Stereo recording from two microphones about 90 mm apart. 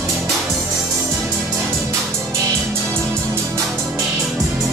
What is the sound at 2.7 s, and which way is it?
Music, 30° right (ahead or behind).